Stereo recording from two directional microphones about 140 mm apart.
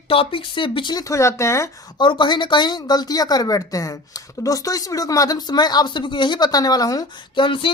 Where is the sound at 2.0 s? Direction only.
35° left (ahead or behind).